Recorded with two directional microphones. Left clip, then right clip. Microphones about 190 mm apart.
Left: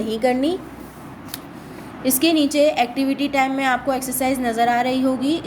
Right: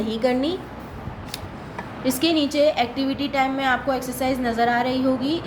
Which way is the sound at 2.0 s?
30° left (ahead or behind).